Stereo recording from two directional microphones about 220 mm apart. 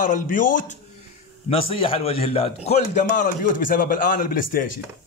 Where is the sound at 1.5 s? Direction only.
25° left (ahead or behind).